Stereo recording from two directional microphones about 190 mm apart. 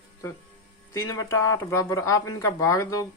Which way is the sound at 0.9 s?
15° left (ahead or behind).